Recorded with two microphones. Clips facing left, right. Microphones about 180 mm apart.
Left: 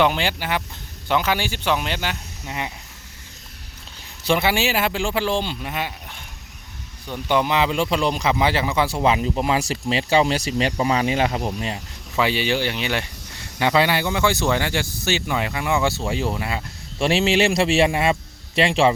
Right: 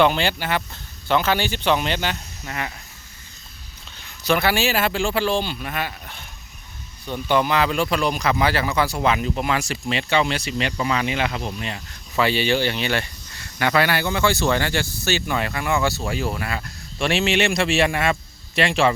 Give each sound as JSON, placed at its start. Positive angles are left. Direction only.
{"t": 0.0, "sound": "speech", "side_deg": 15}
{"t": 4.2, "sound": "speech", "side_deg": 25}
{"t": 11.7, "sound": "speech", "side_deg": 15}